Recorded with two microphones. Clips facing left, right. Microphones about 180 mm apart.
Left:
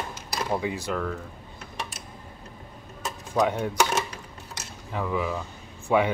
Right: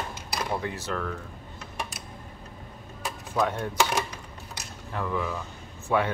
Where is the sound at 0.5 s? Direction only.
15° left (ahead or behind).